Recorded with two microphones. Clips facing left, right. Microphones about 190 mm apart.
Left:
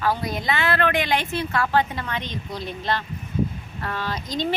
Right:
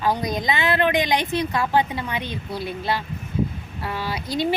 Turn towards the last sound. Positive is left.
turn(degrees=-10)  # may be behind; listen again after turning